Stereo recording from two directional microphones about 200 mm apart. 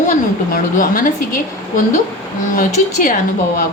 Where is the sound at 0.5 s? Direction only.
45° left (ahead or behind).